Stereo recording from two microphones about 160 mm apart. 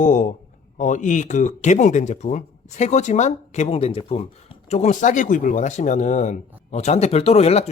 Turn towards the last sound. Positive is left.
turn(degrees=40)  # may be behind; listen again after turning